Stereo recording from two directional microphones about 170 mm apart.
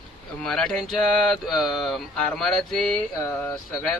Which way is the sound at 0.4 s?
5° left (ahead or behind).